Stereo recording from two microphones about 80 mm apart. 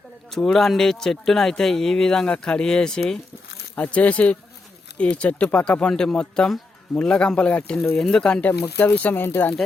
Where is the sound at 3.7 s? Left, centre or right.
Centre.